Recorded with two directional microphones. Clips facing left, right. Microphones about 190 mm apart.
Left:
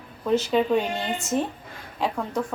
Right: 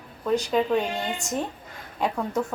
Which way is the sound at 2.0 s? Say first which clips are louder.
Right 1 dB; centre (ahead or behind).